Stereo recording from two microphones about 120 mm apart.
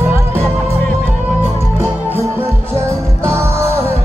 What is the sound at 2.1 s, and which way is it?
Music, 20° right (ahead or behind).